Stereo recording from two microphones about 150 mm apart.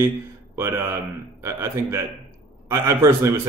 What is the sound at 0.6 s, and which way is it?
A man's voice, 20° right (ahead or behind).